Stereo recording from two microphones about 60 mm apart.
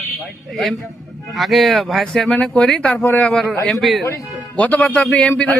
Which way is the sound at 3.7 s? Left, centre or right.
Centre.